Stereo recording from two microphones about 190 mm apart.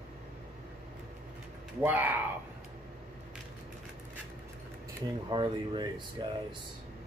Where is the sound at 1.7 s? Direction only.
10° right (ahead or behind).